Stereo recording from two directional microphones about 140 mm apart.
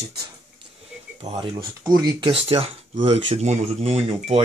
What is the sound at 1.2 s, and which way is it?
Speech, 45° right (ahead or behind).